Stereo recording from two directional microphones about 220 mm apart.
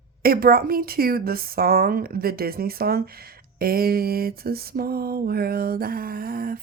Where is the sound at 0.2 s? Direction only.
45° right (ahead or behind).